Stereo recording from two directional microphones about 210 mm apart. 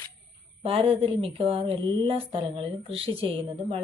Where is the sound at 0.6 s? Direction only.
25° right (ahead or behind).